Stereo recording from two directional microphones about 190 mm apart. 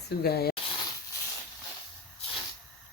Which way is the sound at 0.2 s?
55° left (ahead or behind).